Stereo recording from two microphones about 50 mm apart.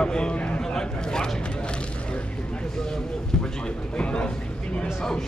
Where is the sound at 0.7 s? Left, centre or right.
Centre.